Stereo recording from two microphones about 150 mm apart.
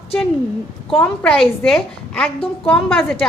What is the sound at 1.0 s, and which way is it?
A woman's voice, 5° left (ahead or behind).